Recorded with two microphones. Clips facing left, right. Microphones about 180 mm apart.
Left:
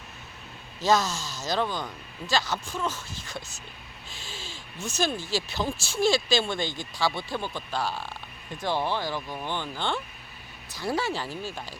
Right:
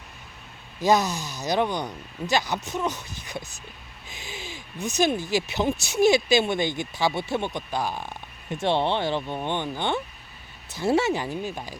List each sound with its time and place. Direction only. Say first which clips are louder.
0.8 s speech: right 3 dB; 15° right (ahead or behind)